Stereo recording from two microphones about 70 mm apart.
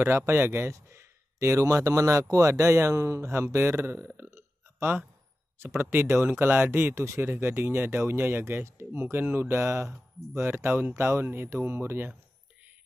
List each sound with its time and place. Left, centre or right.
0.0 s speech: right
4.2 s a sound: right
5.8 s speech: right
7.0 s speech: right
7.2 s speech: right